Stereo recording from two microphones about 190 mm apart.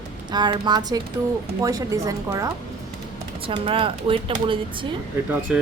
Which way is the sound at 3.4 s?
25° right (ahead or behind).